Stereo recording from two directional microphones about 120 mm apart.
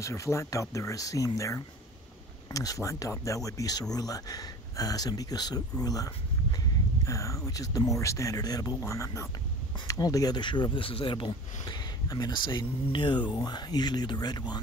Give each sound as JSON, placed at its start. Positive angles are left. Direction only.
{"t": 0.0, "sound": "speech", "side_deg": 25}